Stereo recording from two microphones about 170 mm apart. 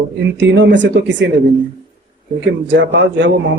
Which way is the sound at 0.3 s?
90° right.